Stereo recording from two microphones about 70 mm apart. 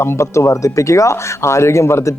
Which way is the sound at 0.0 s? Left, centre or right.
Left.